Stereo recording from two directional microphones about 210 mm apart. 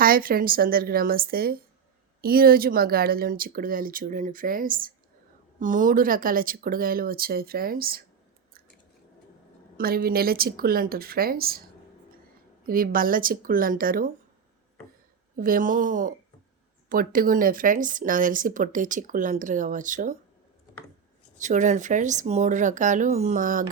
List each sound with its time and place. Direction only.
0.0 s speech: 45° right (ahead or behind)
9.7 s speech: 45° right (ahead or behind)
12.6 s speech: 45° right (ahead or behind)
15.4 s speech: 40° right (ahead or behind)
21.3 s speech: 35° right (ahead or behind)